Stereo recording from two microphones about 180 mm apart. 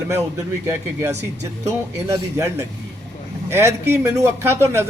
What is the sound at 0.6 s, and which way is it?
Speech, 15° right (ahead or behind).